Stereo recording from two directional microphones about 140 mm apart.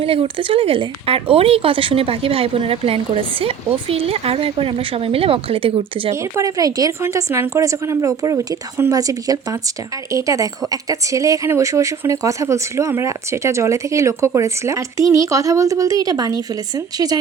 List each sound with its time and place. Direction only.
0.0 s speech: 45° right (ahead or behind)
6.1 s speech: 20° right (ahead or behind)